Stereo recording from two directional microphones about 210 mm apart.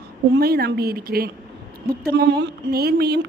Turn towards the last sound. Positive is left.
turn(degrees=-50)  # may be behind; listen again after turning